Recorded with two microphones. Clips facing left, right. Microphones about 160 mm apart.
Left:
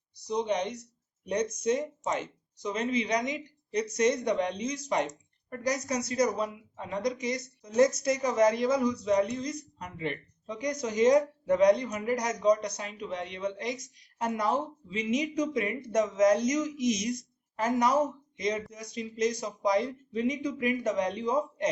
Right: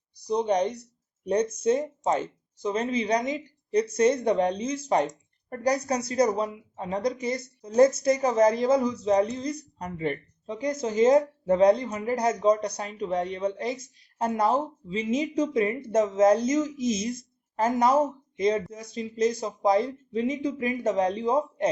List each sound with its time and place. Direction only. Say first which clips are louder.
0.3 s speech: right 5 dB; 35° right (ahead or behind)
10.5 s speech: right 4 dB; 25° right (ahead or behind)